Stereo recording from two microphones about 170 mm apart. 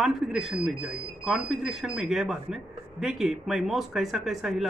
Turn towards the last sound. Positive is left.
turn(degrees=0)  # may be behind; listen again after turning